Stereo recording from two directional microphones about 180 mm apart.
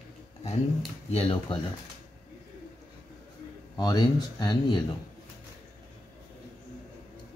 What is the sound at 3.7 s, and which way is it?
Speech, 20° left (ahead or behind).